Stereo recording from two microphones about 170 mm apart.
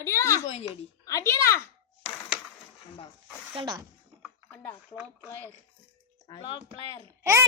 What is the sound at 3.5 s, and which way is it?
Speech, 30° right (ahead or behind).